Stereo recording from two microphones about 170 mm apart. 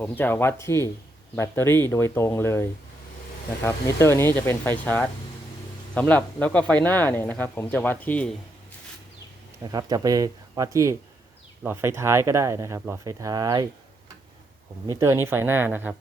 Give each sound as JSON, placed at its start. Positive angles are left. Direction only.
{"t": 0.0, "sound": "speech", "side_deg": 10}
{"t": 9.7, "sound": "speech", "side_deg": -20}
{"t": 14.8, "sound": "speech", "side_deg": -20}